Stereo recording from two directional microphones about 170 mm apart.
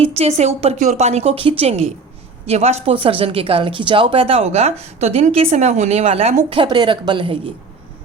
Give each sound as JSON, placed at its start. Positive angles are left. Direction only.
{"t": 0.0, "sound": "speech", "side_deg": -35}